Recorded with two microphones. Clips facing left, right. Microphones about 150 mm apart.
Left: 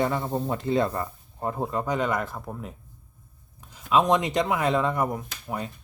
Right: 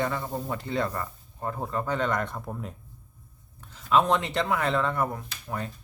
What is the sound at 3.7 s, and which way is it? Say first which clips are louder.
Speech: left 2 dB; 15° left (ahead or behind).